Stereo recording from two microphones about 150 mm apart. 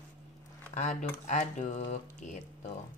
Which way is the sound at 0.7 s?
50° left (ahead or behind).